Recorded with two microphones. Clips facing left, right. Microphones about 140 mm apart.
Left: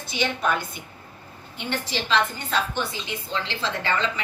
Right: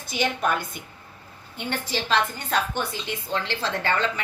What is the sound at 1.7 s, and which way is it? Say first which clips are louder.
Speech: even; 45° right (ahead or behind).